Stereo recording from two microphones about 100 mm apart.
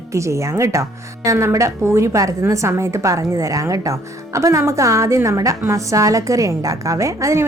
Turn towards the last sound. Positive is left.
turn(degrees=-30)  # may be behind; listen again after turning